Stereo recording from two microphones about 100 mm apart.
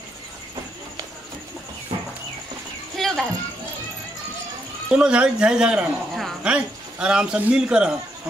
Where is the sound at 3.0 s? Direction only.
5° left (ahead or behind).